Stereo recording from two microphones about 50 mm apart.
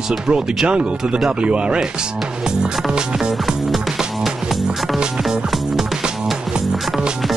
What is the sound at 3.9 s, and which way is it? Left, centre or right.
Music, centre.